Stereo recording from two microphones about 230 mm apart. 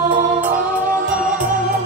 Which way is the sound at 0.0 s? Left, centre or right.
Right.